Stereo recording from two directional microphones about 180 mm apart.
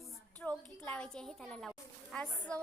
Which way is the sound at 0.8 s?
5° left (ahead or behind).